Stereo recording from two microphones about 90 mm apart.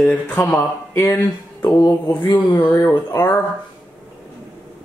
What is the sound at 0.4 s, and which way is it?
Speech, 30° left (ahead or behind).